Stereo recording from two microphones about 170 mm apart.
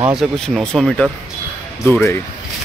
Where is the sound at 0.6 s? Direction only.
Centre (ahead or behind).